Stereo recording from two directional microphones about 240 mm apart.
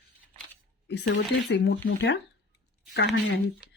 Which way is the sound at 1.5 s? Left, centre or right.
Left.